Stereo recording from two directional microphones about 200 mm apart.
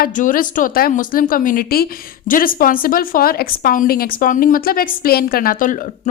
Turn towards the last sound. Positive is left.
turn(degrees=40)  # may be behind; listen again after turning